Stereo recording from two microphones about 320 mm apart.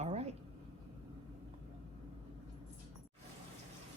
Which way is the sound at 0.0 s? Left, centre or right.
Right.